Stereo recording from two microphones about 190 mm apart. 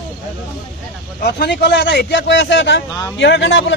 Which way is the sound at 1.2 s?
60° left (ahead or behind).